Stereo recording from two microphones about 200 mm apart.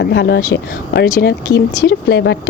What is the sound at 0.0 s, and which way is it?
A woman's voice, 60° left (ahead or behind).